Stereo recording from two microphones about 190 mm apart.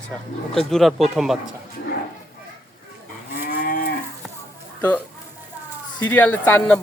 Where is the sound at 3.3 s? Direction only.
45° left (ahead or behind).